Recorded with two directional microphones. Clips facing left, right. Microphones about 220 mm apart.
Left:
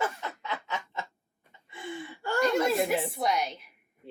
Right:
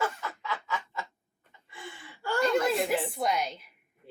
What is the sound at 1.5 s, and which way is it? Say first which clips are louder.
Gasp: left 7 dB; 25° left (ahead or behind).